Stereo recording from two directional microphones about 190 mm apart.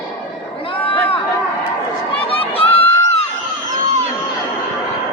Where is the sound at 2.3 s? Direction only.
30° left (ahead or behind).